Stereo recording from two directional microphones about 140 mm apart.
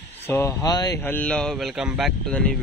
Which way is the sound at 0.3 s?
15° left (ahead or behind).